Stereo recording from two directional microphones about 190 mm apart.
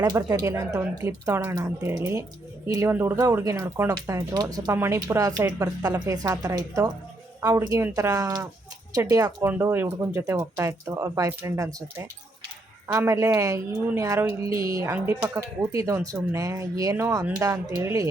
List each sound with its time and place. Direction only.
0.0 s a woman's voice: 20° right (ahead or behind)